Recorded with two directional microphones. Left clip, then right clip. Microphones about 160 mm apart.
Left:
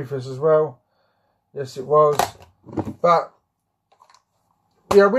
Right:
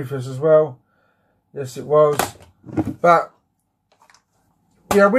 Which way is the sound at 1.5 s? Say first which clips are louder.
Right 1 dB; 5° left (ahead or behind).